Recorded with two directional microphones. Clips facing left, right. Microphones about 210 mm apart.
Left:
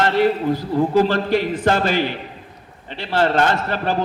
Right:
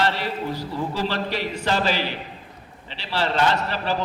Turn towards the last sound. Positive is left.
turn(degrees=50)  # may be behind; listen again after turning